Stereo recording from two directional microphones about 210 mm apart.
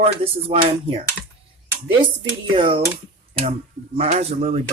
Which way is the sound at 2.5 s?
25° right (ahead or behind).